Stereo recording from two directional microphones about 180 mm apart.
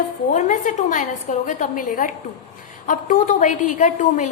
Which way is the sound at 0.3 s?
45° left (ahead or behind).